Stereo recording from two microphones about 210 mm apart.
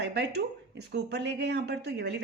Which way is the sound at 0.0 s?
55° right (ahead or behind).